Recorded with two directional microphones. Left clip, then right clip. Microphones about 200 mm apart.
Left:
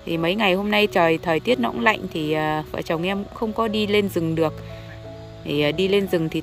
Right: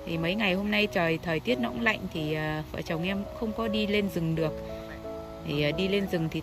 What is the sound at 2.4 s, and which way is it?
Speech, 35° left (ahead or behind).